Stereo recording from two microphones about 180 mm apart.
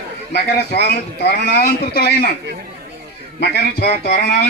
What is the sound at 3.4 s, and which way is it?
Speech, 65° left (ahead or behind).